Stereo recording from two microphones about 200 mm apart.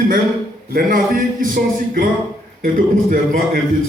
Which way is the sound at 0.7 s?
45° right (ahead or behind).